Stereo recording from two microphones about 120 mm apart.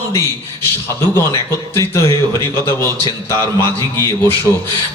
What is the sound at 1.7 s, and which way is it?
A man's voice, 25° left (ahead or behind).